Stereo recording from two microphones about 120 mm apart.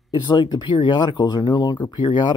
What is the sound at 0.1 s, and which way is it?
Speech, 40° left (ahead or behind).